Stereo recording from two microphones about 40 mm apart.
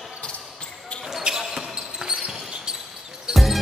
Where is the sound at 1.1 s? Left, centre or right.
Centre.